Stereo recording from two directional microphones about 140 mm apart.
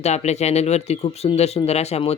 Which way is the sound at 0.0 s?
50° left (ahead or behind).